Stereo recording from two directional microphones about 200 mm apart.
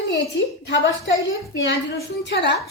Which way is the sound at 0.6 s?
60° left (ahead or behind).